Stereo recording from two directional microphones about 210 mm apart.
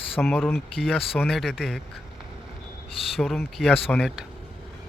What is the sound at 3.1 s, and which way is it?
Speech, centre (ahead or behind).